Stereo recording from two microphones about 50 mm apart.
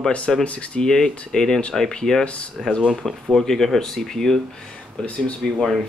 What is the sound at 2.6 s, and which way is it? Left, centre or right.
Speech, centre.